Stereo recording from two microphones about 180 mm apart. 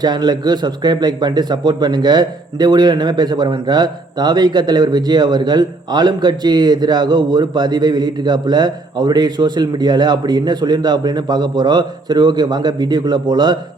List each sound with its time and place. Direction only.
0.0 s a man's voice: 25° right (ahead or behind)